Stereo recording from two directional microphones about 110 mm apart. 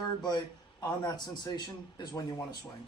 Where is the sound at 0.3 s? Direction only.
35° left (ahead or behind).